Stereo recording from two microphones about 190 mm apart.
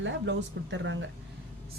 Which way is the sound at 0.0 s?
75° right (ahead or behind).